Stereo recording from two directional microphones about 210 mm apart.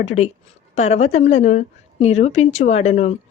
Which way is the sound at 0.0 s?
30° left (ahead or behind).